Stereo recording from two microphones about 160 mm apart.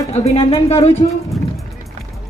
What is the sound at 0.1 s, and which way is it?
Speech, 40° left (ahead or behind).